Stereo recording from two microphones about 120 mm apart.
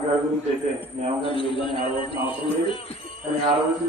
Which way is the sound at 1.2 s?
50° left (ahead or behind).